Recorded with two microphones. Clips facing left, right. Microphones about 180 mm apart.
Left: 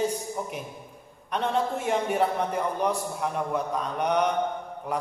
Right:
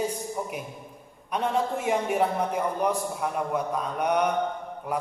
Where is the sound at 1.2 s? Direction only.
10° right (ahead or behind).